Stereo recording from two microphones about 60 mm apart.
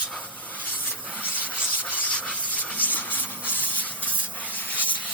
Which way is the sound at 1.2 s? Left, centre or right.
Left.